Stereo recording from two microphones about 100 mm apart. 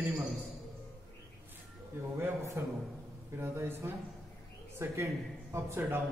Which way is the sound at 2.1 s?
25° right (ahead or behind).